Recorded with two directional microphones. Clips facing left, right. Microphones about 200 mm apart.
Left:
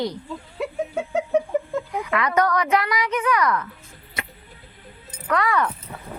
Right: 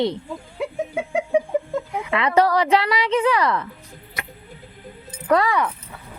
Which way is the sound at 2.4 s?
30° right (ahead or behind).